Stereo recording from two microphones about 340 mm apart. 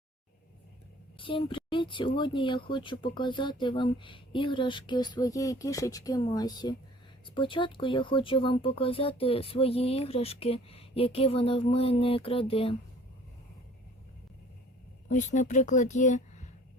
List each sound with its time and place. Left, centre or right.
1.2 s speech: centre
15.1 s speech: left